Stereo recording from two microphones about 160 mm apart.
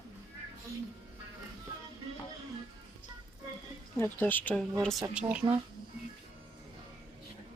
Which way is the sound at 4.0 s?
10° left (ahead or behind).